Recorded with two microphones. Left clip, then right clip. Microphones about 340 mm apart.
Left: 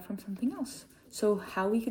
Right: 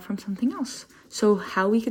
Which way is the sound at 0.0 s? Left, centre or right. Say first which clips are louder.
Right 7 dB; centre.